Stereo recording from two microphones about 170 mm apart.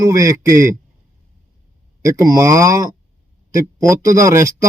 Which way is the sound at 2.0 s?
20° right (ahead or behind).